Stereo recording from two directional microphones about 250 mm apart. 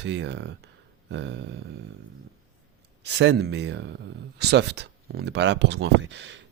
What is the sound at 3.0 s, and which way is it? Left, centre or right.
Speech, right.